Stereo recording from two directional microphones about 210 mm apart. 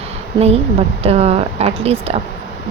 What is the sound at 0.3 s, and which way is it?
Speech, 30° right (ahead or behind).